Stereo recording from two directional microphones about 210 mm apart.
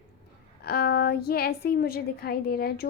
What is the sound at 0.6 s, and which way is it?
A woman's voice, 45° left (ahead or behind).